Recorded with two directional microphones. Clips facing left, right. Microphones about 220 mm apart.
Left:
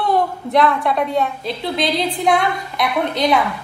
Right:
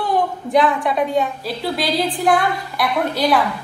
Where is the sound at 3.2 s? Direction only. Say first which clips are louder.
Even; 5° right (ahead or behind).